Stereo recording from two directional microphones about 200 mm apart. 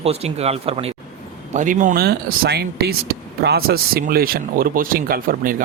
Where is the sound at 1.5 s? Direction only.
40° right (ahead or behind).